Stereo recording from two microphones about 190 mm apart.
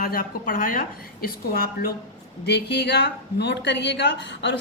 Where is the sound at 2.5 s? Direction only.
60° left (ahead or behind).